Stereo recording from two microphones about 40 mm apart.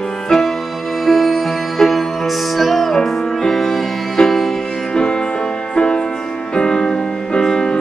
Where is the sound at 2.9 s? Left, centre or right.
Centre.